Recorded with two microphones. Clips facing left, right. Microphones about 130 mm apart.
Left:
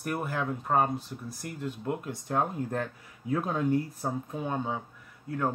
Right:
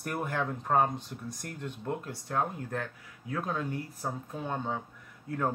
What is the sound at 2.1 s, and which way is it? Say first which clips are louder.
Speech: left 3 dB; 20° left (ahead or behind).